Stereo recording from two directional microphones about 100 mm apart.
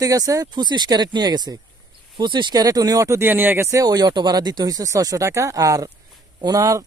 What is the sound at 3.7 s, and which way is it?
Speech, 35° right (ahead or behind).